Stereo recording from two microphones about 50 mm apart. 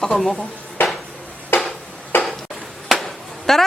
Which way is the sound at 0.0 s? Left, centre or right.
Centre.